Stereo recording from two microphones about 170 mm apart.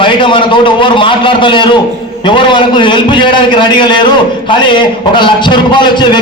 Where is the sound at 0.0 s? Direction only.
30° left (ahead or behind).